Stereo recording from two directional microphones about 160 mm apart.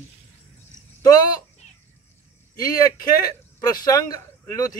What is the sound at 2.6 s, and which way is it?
Speech, 25° left (ahead or behind).